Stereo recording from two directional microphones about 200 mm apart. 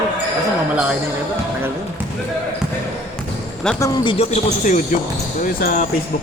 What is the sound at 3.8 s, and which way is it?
Speech, 25° left (ahead or behind).